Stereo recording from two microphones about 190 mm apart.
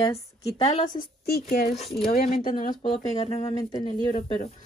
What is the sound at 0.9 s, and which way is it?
Speech, 55° left (ahead or behind).